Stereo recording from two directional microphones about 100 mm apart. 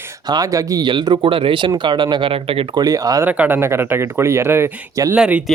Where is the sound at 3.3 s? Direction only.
15° right (ahead or behind).